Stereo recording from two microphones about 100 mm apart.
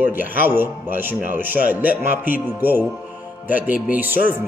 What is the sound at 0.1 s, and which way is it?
Speech, 15° right (ahead or behind).